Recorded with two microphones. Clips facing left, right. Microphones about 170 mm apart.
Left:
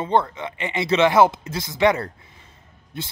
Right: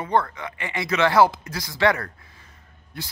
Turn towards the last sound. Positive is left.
turn(degrees=20)  # may be behind; listen again after turning